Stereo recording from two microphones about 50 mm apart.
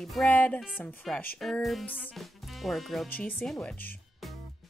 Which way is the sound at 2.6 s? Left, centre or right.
Centre.